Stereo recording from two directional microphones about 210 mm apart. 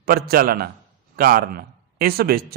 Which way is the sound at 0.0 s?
45° right (ahead or behind).